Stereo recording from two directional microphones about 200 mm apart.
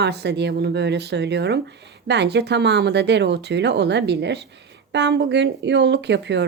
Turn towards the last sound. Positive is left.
turn(degrees=-60)  # may be behind; listen again after turning